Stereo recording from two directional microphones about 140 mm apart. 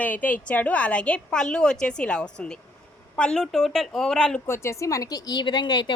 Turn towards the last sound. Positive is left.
turn(degrees=30)  # may be behind; listen again after turning